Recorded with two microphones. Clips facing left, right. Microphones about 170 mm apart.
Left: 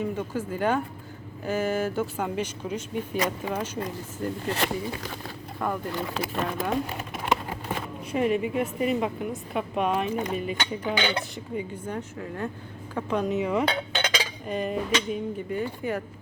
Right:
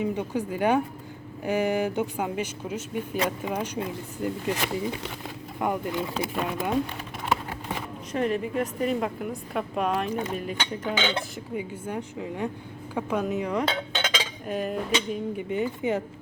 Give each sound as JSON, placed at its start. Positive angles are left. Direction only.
{"t": 0.0, "sound": "speech", "side_deg": -15}
{"t": 2.2, "sound": "speech", "side_deg": -5}
{"t": 6.1, "sound": "speech", "side_deg": -5}
{"t": 8.1, "sound": "speech", "side_deg": 5}
{"t": 11.1, "sound": "speech", "side_deg": -5}
{"t": 12.9, "sound": "cutlery", "side_deg": -10}
{"t": 15.4, "sound": "speech", "side_deg": -20}